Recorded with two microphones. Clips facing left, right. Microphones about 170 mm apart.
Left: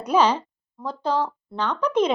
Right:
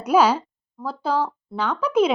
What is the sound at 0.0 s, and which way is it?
Speech, 10° right (ahead or behind).